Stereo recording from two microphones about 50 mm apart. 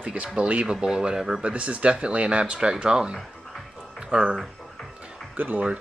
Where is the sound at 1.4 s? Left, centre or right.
Right.